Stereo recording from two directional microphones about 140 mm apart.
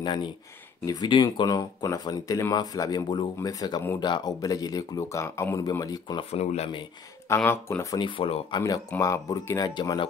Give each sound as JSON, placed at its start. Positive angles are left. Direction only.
{"t": 0.0, "sound": "speech", "side_deg": 35}
{"t": 6.3, "sound": "speech", "side_deg": 50}
{"t": 7.2, "sound": "speech", "side_deg": 20}
{"t": 8.0, "sound": "speech", "side_deg": 35}